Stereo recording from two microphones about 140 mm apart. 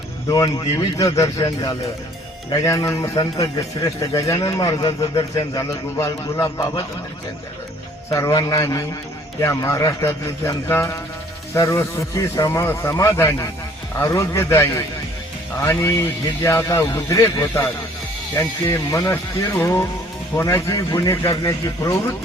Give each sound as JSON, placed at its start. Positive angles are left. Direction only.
{"t": 0.3, "sound": "a man's voice", "side_deg": 30}
{"t": 8.1, "sound": "a man's voice", "side_deg": 25}